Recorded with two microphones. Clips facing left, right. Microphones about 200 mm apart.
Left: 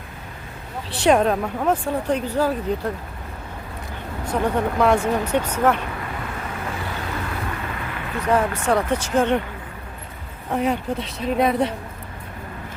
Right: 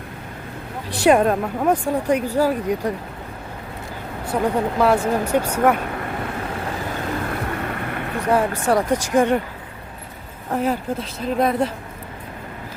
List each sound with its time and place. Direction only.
0.9 s speech: 10° right (ahead or behind)
4.3 s speech: 10° right (ahead or behind)
7.3 s boat: 50° right (ahead or behind)
8.3 s speech: 10° right (ahead or behind)
10.5 s speech: centre (ahead or behind)